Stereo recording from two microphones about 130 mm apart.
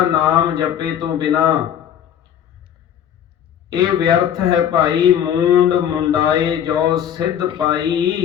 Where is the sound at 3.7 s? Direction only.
30° right (ahead or behind).